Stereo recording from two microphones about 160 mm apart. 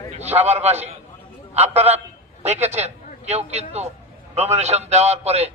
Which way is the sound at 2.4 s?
45° right (ahead or behind).